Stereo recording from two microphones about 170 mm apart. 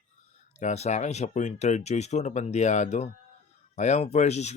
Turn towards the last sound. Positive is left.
turn(degrees=40)  # may be behind; listen again after turning